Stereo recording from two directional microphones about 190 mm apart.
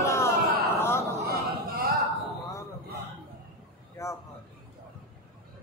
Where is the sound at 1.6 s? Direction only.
50° right (ahead or behind).